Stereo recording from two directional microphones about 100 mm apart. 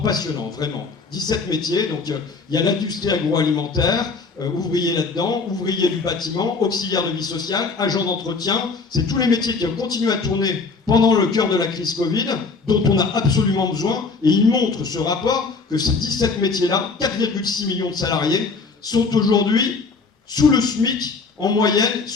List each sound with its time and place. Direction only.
0.0 s a man's voice: 45° left (ahead or behind)